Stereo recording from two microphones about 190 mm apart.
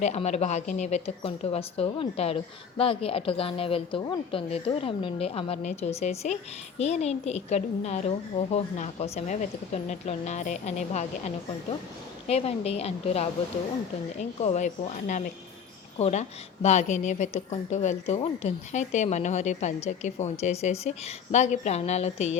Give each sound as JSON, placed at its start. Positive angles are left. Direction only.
{"t": 0.0, "sound": "a woman's voice", "side_deg": 35}
{"t": 12.3, "sound": "a woman's voice", "side_deg": 30}